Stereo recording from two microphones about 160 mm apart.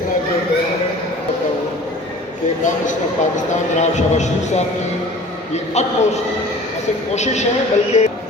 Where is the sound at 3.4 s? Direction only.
45° left (ahead or behind).